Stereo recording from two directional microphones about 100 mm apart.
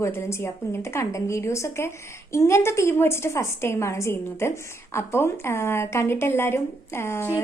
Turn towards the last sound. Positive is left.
turn(degrees=25)  # may be behind; listen again after turning